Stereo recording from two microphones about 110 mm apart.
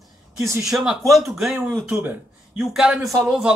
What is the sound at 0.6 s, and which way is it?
A man's voice, 5° right (ahead or behind).